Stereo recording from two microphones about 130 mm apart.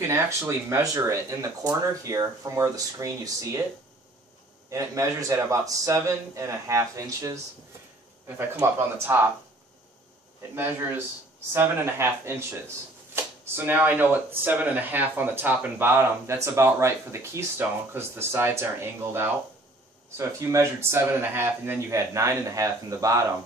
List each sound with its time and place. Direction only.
0.0 s speech: 20° right (ahead or behind)
4.6 s speech: 25° right (ahead or behind)
8.4 s speech: 20° right (ahead or behind)
10.5 s speech: 15° right (ahead or behind)